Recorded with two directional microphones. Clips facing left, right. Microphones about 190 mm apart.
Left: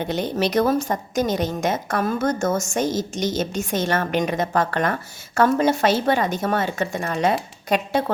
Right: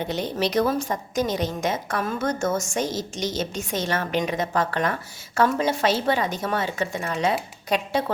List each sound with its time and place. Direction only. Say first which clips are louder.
0.1 s a woman's voice: left 3 dB; 50° left (ahead or behind)